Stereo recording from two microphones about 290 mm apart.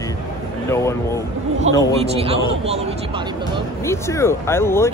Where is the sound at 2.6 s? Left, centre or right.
Right.